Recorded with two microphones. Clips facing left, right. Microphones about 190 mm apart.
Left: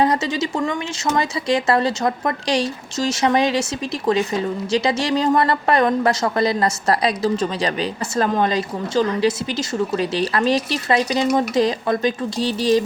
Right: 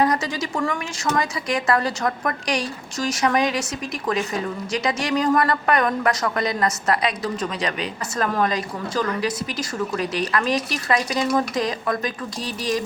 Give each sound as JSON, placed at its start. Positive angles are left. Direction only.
{"t": 0.0, "sound": "speech", "side_deg": 25}
{"t": 4.7, "sound": "speech", "side_deg": 30}